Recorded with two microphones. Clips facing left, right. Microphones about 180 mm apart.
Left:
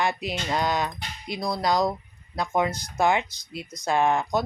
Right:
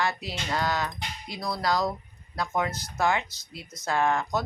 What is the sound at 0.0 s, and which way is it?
Speech, 20° left (ahead or behind).